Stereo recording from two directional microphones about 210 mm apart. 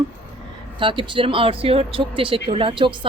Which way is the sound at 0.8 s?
25° right (ahead or behind).